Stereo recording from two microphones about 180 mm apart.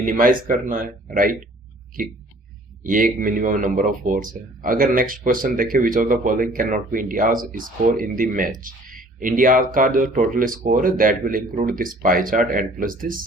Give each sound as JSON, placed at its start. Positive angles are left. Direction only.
{"t": 0.0, "sound": "speech", "side_deg": -50}
{"t": 2.8, "sound": "speech", "side_deg": -50}